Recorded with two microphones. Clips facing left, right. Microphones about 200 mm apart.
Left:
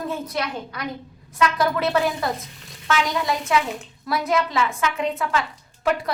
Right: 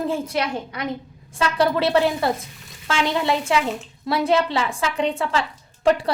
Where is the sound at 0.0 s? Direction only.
30° right (ahead or behind).